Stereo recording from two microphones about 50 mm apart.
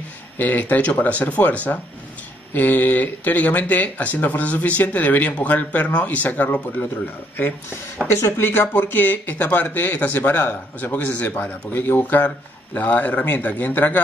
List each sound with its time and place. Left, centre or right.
0.4 s speech: left
8.1 s speech: left
10.8 s a man's voice: left
12.0 s speech: left